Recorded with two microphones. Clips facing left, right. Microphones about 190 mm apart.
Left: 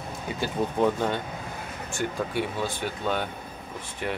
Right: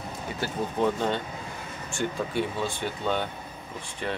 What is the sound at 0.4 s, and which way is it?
Speech, 10° left (ahead or behind).